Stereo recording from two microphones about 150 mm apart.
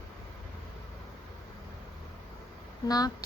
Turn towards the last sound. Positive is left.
turn(degrees=25)  # may be behind; listen again after turning